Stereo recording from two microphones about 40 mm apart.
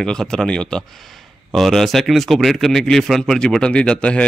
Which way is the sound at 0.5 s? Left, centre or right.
Left.